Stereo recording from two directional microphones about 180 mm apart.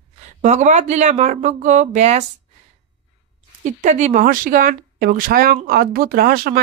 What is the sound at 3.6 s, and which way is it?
Speech, 40° right (ahead or behind).